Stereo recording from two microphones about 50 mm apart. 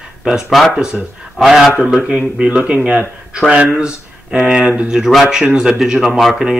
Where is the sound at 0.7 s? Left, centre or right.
Centre.